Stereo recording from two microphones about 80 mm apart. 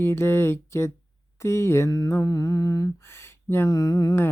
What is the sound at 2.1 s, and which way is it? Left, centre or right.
Humming, left.